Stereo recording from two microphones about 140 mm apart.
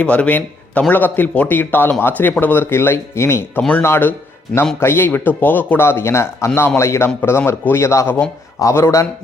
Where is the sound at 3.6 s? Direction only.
10° left (ahead or behind).